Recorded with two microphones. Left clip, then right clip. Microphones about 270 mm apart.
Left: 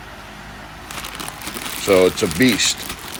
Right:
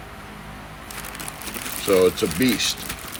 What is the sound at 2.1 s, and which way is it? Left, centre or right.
Speech, left.